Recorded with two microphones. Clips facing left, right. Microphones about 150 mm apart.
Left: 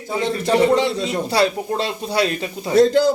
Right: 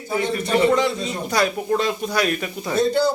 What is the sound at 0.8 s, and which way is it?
A man's voice, 30° left (ahead or behind).